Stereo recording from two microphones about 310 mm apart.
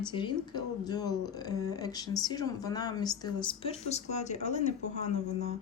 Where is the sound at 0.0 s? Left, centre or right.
Centre.